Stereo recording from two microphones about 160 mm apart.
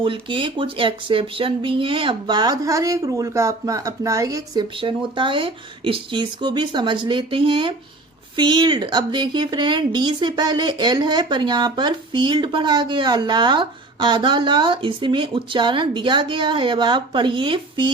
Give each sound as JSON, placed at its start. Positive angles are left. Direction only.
{"t": 0.0, "sound": "a woman's voice", "side_deg": -30}